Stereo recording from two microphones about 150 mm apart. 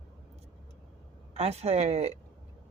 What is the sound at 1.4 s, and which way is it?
Speech, 45° right (ahead or behind).